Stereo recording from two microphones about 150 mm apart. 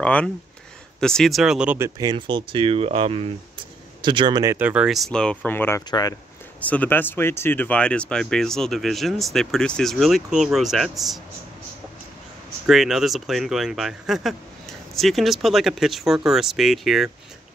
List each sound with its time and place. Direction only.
0.0 s speech: 10° left (ahead or behind)
1.8 s speech: 25° right (ahead or behind)
4.6 s speech: 10° right (ahead or behind); by 5.9 s 15° left (ahead or behind)
5.9 s speech: 25° left (ahead or behind)
6.6 s speech: 10° left (ahead or behind)
12.6 s speech: centre (ahead or behind)